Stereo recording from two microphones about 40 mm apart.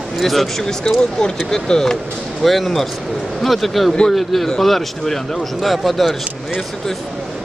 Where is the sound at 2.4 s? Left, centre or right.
Centre.